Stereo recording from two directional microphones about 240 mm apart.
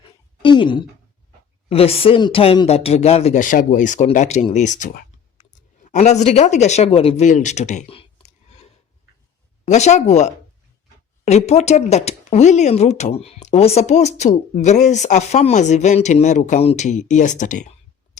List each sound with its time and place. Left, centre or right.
0.0 s a sound: centre
1.7 s speech: left
9.6 s speech: left